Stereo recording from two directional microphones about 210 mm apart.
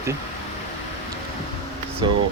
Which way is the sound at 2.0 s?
20° right (ahead or behind).